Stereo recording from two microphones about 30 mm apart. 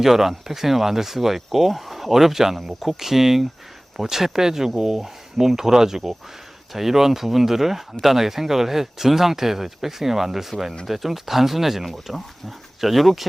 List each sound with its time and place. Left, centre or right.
0.0 s speech: centre